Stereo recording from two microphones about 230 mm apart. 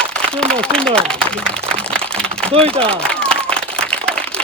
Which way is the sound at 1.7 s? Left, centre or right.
Centre.